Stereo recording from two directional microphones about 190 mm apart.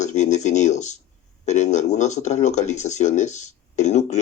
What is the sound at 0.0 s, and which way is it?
Speech, 35° left (ahead or behind).